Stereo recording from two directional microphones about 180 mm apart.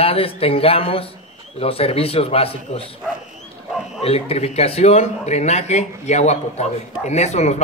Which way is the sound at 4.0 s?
35° left (ahead or behind).